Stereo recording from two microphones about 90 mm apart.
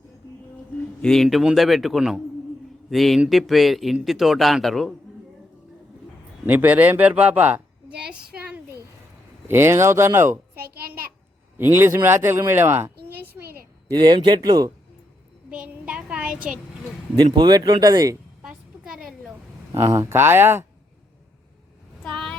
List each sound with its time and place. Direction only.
1.0 s a man's voice: 5° left (ahead or behind)
6.4 s a woman's voice: 20° right (ahead or behind)
9.5 s speech: 30° right (ahead or behind)
11.5 s speech: 25° right (ahead or behind)
13.9 s speech: 60° right (ahead or behind)
15.4 s child singing: 15° right (ahead or behind)
17.3 s speech: 55° right (ahead or behind)
18.4 s a sound: 5° right (ahead or behind)
19.7 s speech: 35° right (ahead or behind)
22.0 s a sound: 5° left (ahead or behind)